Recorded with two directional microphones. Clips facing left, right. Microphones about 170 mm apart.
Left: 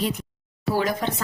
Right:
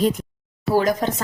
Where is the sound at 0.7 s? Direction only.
45° right (ahead or behind).